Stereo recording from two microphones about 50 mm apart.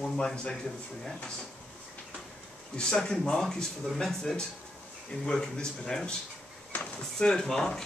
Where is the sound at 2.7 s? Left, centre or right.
Centre.